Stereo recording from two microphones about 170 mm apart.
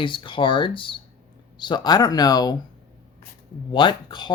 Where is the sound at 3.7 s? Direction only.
30° left (ahead or behind).